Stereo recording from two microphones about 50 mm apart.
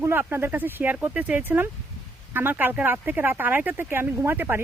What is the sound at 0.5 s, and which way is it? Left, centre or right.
Speech, right.